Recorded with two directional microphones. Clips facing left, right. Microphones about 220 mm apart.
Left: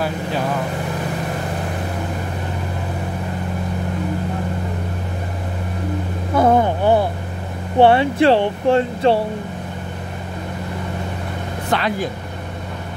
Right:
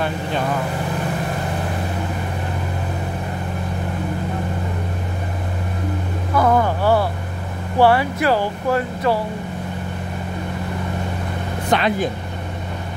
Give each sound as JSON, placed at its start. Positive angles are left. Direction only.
{"t": 6.3, "sound": "vehicle", "side_deg": 25}
{"t": 7.7, "sound": "speech", "side_deg": 25}
{"t": 11.7, "sound": "speech", "side_deg": -20}